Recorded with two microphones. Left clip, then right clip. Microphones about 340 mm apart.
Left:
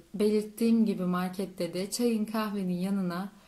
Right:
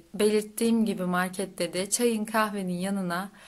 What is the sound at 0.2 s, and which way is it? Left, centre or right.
Speech, right.